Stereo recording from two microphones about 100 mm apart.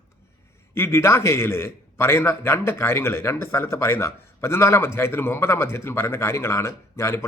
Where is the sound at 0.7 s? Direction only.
25° left (ahead or behind).